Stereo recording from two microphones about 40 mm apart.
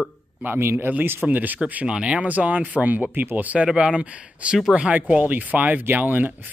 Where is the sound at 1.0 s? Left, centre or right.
Right.